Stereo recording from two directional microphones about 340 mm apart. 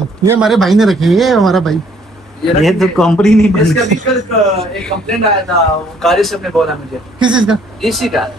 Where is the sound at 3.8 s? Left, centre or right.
Right.